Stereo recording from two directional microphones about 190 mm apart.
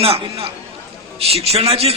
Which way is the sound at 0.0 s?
30° right (ahead or behind).